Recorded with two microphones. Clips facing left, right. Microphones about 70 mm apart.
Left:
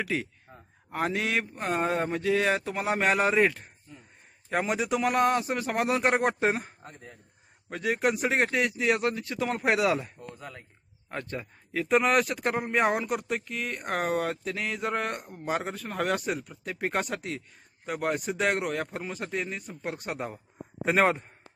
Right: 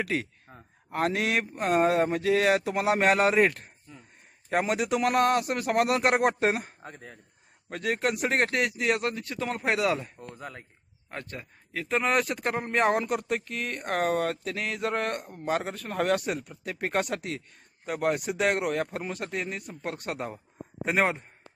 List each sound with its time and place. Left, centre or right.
0.0 s speech: centre
0.5 s speech: right
0.9 s speech: centre
6.8 s a man's voice: right
7.7 s speech: centre
10.2 s speech: right
11.1 s speech: centre